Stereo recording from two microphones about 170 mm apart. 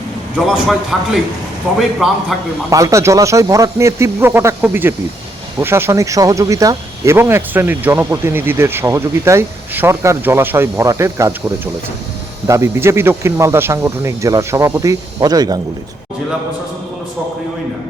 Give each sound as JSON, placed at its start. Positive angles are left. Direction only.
{"t": 0.3, "sound": "speech", "side_deg": 0}
{"t": 2.3, "sound": "speech", "side_deg": 0}
{"t": 2.6, "sound": "speech", "side_deg": -20}